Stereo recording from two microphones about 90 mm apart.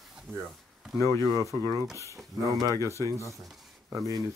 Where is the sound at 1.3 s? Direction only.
45° right (ahead or behind).